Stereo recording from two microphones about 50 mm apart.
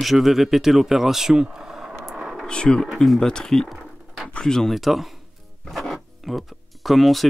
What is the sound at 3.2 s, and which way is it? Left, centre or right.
Speech, centre.